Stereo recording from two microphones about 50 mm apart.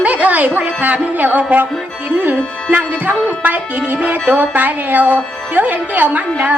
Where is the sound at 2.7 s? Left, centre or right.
Right.